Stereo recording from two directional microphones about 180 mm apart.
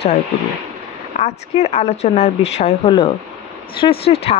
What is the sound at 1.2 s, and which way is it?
A woman's voice, 35° left (ahead or behind).